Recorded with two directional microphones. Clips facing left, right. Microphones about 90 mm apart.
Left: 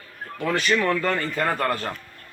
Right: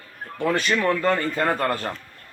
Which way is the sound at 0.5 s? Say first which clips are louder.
Left 2 dB; 30° right (ahead or behind).